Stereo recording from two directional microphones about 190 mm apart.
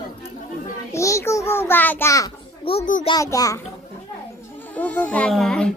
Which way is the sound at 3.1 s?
20° left (ahead or behind).